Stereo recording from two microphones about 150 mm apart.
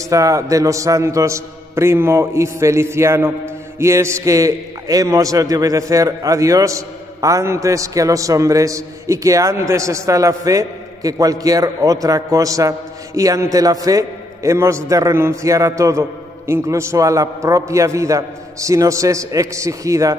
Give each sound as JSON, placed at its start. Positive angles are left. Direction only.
{"t": 0.1, "sound": "a man's voice", "side_deg": -20}